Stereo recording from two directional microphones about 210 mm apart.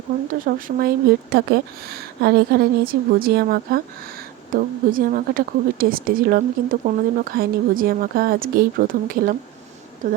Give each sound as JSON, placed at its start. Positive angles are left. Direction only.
{"t": 0.4, "sound": "a woman's voice", "side_deg": -45}